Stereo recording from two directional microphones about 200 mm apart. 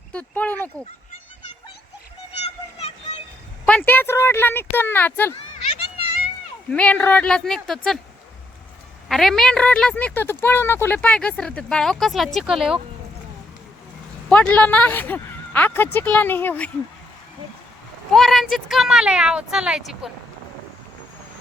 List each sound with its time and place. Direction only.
0.1 s speech: 5° left (ahead or behind)
2.4 s a sound: 30° left (ahead or behind)
3.7 s speech: 10° left (ahead or behind)
6.7 s a woman's voice: 5° left (ahead or behind)
9.0 s a woman's voice: centre (ahead or behind)
14.3 s speech: 5° left (ahead or behind)
18.1 s a woman's voice: centre (ahead or behind)